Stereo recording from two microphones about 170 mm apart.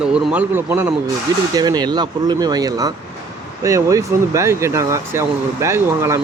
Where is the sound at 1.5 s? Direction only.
25° right (ahead or behind).